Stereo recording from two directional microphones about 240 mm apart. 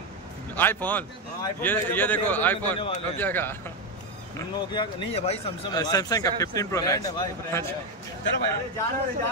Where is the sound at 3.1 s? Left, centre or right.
Centre.